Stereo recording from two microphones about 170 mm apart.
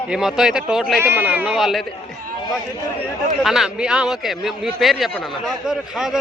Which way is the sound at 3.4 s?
Centre (ahead or behind).